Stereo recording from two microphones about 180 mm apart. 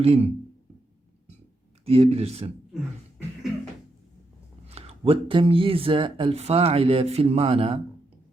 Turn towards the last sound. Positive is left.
turn(degrees=-35)  # may be behind; listen again after turning